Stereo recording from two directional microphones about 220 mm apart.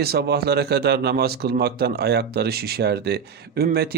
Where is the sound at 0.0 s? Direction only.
45° right (ahead or behind).